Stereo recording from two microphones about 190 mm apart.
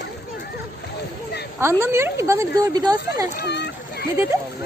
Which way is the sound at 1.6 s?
15° right (ahead or behind).